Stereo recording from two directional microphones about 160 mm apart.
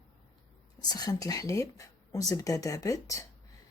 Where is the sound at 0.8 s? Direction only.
25° left (ahead or behind).